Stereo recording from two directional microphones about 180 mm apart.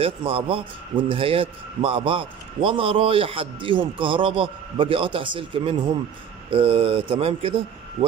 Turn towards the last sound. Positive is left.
turn(degrees=-30)  # may be behind; listen again after turning